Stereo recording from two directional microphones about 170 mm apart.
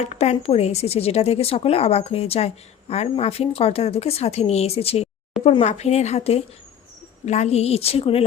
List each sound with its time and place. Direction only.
0.0 s speech: 40° left (ahead or behind)